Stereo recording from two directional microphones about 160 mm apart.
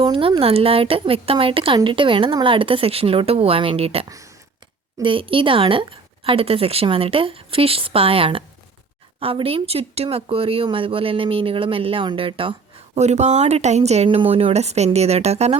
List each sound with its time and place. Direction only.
0.0 s speech: 30° right (ahead or behind)